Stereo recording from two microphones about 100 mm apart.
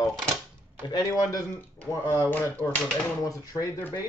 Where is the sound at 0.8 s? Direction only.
40° left (ahead or behind).